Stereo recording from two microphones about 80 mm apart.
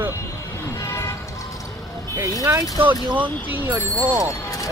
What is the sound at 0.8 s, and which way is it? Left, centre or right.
Music, left.